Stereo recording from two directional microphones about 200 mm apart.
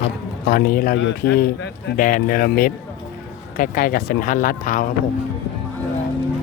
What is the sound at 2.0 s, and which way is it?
Speech, 40° left (ahead or behind).